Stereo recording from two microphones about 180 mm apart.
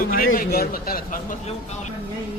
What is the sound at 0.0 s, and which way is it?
A man's voice, 55° left (ahead or behind).